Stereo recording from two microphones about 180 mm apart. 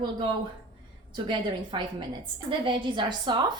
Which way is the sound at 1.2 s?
25° right (ahead or behind).